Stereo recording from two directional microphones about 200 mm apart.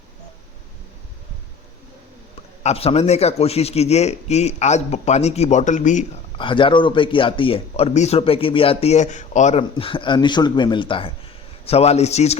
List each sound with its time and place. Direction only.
2.6 s speech: 30° left (ahead or behind)
6.3 s speech: 25° left (ahead or behind)